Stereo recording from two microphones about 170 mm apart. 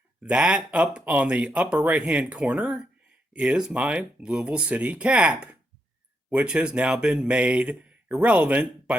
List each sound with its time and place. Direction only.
0.2 s speech: 5° right (ahead or behind)